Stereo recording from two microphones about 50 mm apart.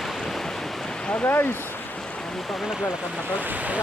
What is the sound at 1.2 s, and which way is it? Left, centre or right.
Speech, left.